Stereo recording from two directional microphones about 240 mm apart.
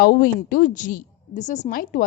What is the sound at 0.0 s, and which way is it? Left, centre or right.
A woman's voice, left.